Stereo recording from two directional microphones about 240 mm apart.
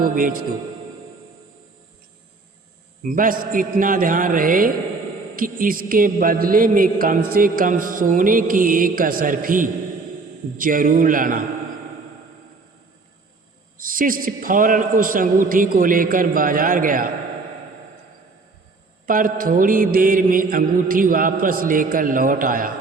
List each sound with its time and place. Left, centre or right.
0.0 s a man's voice: right
3.0 s a man's voice: right
13.7 s a man's voice: right
19.0 s a man's voice: right